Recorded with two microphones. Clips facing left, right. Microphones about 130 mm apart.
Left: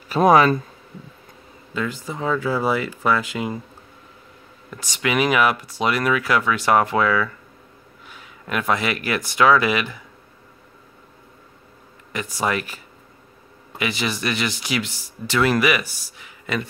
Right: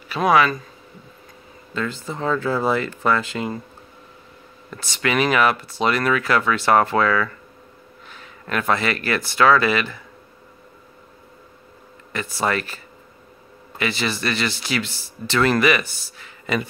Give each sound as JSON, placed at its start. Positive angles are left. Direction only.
{"t": 0.1, "sound": "speech", "side_deg": 40}
{"t": 1.7, "sound": "speech", "side_deg": 15}
{"t": 4.6, "sound": "speech", "side_deg": 15}
{"t": 12.1, "sound": "speech", "side_deg": 15}
{"t": 16.5, "sound": "speech", "side_deg": 0}